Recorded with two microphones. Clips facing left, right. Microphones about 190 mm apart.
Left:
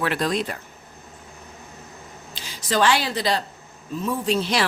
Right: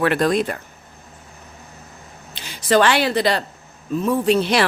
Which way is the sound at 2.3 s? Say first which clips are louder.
Right 8 dB; 60° right (ahead or behind).